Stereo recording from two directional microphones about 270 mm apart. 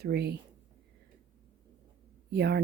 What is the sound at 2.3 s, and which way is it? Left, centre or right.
Speech, right.